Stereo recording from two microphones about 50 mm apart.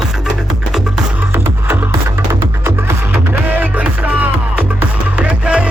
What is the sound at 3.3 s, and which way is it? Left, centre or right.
Music, right.